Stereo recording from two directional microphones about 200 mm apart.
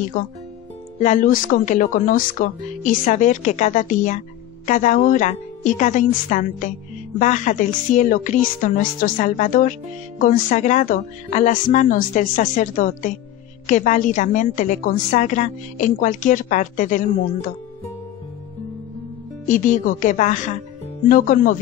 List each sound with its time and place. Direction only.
0.9 s speech: 40° left (ahead or behind)
19.4 s speech: 40° left (ahead or behind)